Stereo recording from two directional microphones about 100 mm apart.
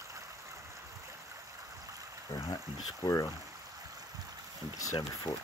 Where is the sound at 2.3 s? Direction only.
40° left (ahead or behind).